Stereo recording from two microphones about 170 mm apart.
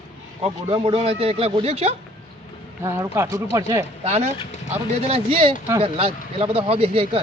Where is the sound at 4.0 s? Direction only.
40° right (ahead or behind).